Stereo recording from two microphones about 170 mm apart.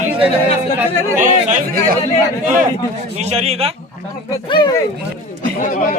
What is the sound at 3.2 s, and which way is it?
Speech, 40° right (ahead or behind).